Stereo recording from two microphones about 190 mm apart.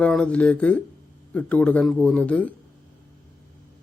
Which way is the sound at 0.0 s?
5° left (ahead or behind).